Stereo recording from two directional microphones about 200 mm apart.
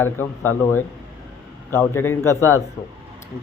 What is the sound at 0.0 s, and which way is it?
Speech, 10° left (ahead or behind).